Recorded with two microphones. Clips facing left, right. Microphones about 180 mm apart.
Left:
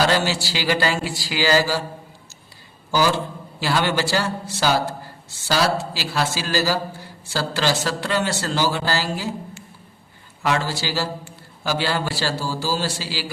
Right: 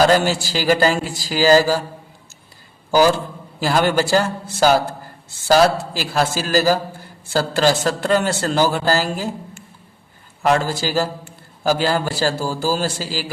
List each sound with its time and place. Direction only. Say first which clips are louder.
0.0 s a man's voice: right 5 dB; 50° right (ahead or behind)
3.6 s a man's voice: right 4 dB; 45° right (ahead or behind)